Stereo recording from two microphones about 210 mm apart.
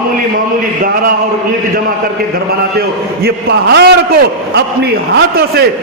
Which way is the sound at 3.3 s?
50° right (ahead or behind).